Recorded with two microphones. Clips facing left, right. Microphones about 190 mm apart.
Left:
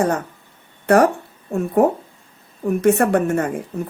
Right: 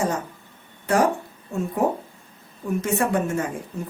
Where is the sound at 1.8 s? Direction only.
60° left (ahead or behind).